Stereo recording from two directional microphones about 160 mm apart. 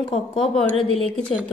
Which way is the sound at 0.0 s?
35° left (ahead or behind).